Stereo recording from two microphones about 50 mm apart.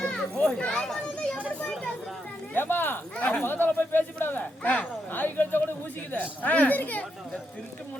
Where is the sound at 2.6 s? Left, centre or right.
Left.